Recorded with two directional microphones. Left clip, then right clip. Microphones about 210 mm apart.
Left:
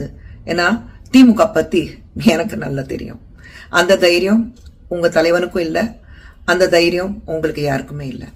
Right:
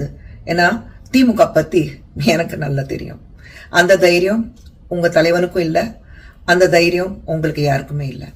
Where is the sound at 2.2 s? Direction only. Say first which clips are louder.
Even; 15° left (ahead or behind).